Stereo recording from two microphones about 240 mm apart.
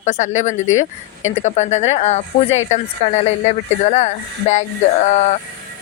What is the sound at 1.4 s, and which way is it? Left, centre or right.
Speech, left.